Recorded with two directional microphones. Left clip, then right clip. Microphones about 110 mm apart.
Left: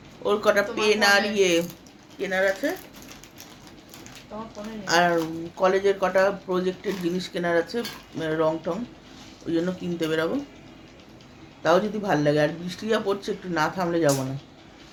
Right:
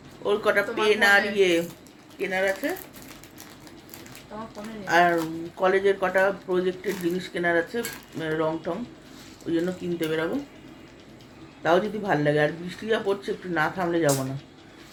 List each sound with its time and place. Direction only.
0.2 s speech: 25° left (ahead or behind)
4.9 s speech: 25° left (ahead or behind)
11.6 s speech: 20° left (ahead or behind)